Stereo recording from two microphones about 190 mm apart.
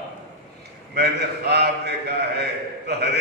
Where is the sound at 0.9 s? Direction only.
60° right (ahead or behind).